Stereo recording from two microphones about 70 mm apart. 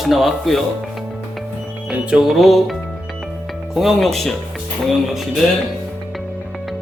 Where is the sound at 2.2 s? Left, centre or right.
Centre.